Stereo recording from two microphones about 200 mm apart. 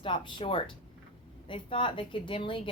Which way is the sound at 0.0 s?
25° left (ahead or behind).